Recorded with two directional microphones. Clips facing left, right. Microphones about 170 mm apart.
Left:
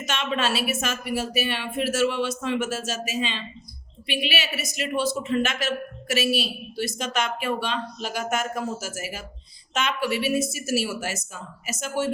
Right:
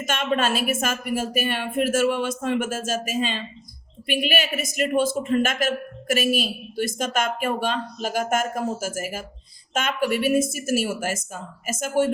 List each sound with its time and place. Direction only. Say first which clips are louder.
0.0 s a woman's voice: right 3 dB; 50° right (ahead or behind)